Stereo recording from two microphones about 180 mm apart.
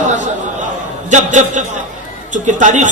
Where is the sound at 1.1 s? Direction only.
40° right (ahead or behind).